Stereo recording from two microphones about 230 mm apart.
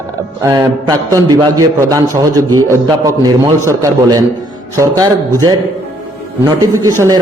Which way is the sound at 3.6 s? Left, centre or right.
Centre.